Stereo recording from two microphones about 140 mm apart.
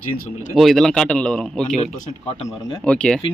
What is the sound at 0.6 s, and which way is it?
Speech, centre (ahead or behind).